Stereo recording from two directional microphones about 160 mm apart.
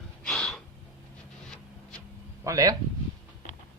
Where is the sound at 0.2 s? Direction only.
5° left (ahead or behind).